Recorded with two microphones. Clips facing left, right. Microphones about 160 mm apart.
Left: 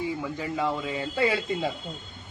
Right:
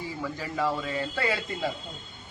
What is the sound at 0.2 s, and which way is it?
Speech, 15° left (ahead or behind).